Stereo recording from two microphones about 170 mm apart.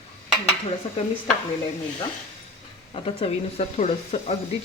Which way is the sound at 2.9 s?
35° left (ahead or behind).